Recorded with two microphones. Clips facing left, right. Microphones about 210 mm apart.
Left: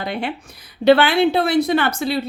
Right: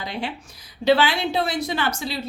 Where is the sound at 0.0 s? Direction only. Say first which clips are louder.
Left 5 dB; 60° left (ahead or behind).